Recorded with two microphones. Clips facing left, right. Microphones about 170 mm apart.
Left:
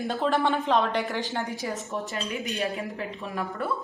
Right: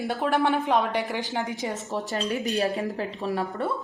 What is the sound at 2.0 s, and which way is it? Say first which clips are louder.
A woman's voice: right 4 dB; 40° right (ahead or behind).